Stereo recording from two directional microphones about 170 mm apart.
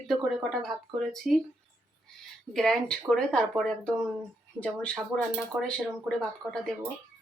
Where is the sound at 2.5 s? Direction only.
5° left (ahead or behind).